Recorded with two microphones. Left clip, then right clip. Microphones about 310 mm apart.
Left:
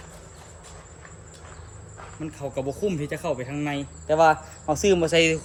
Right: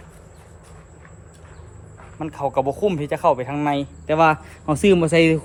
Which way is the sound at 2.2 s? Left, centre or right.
Centre.